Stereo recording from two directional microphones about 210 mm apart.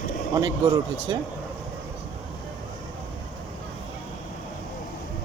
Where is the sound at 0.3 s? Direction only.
15° right (ahead or behind).